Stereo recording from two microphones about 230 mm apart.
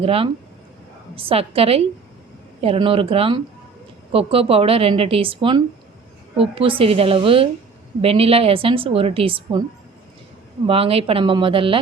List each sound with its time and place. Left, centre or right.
0.0 s a woman's voice: right
10.7 s a woman's voice: right